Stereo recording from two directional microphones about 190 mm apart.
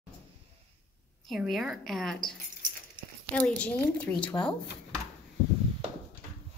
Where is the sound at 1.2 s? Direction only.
Centre (ahead or behind).